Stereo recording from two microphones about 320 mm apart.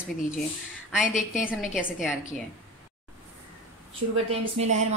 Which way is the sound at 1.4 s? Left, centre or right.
Centre.